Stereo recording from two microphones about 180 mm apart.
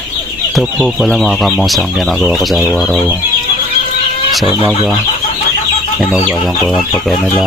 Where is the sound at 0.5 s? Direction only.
5° right (ahead or behind).